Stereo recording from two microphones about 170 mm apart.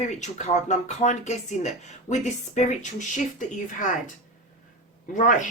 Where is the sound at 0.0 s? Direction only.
45° left (ahead or behind).